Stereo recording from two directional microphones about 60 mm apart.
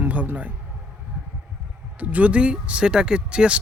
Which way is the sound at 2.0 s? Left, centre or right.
Right.